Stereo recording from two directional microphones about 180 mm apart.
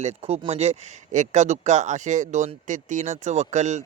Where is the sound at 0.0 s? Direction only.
35° right (ahead or behind).